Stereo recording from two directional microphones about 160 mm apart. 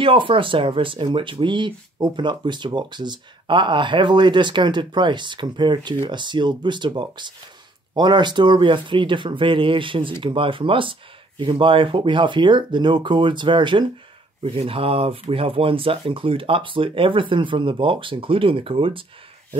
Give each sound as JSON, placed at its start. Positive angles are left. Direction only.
{"t": 0.0, "sound": "speech", "side_deg": -35}